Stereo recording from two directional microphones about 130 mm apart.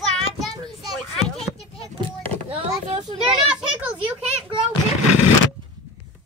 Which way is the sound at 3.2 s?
5° right (ahead or behind).